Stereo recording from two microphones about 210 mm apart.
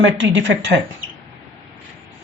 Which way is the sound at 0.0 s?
60° right (ahead or behind).